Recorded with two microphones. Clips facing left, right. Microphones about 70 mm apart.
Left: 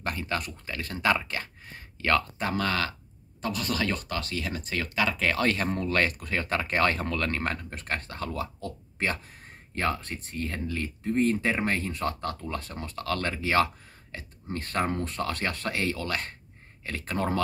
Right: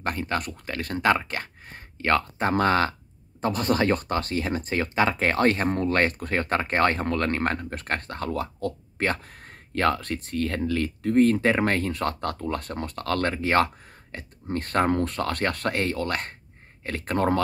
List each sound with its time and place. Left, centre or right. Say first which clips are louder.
0.0 s speech: right 4 dB; right